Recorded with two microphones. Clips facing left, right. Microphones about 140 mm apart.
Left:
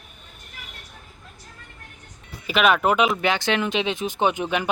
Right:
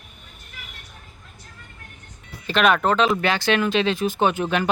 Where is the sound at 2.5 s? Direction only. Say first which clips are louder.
Even; 5° left (ahead or behind).